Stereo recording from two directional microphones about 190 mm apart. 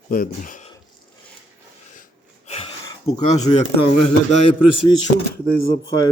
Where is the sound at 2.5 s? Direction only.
30° left (ahead or behind).